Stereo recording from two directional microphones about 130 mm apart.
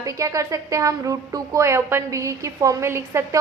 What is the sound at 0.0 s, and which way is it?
A woman's voice, 25° right (ahead or behind).